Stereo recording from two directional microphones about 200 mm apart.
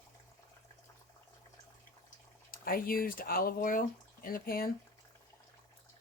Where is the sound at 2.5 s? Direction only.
45° left (ahead or behind).